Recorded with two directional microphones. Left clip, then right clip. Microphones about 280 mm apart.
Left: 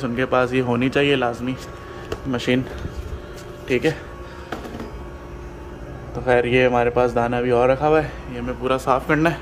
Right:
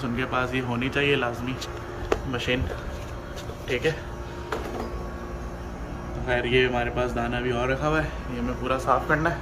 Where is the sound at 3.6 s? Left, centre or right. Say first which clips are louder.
Left 5 dB; left.